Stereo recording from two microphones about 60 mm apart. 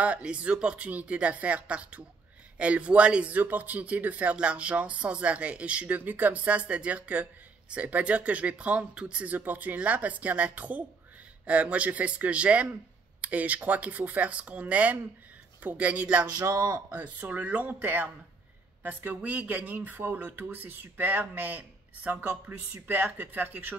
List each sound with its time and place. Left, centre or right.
0.0 s speech: right
16.3 s a man's voice: right
16.9 s speech: right